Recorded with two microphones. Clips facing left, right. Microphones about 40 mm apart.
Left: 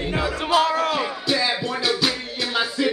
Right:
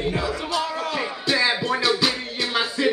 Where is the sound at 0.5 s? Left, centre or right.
Left.